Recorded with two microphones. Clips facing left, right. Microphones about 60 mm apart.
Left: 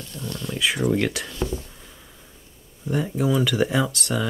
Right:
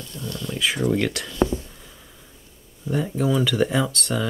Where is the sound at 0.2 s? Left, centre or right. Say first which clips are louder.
Even; left.